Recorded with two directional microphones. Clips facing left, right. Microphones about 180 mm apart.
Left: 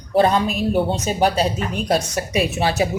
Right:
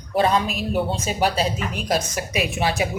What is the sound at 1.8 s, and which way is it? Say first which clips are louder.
Speech: left 3 dB; 35° left (ahead or behind).